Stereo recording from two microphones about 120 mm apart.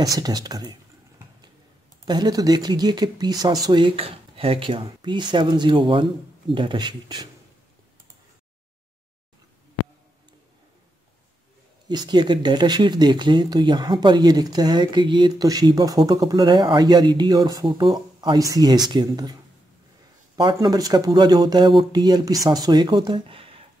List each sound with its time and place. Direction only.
0.0 s speech: 35° right (ahead or behind)
2.0 s speech: 35° right (ahead or behind)
11.9 s speech: 35° right (ahead or behind)
20.6 s speech: 30° right (ahead or behind); by 23.6 s 50° right (ahead or behind)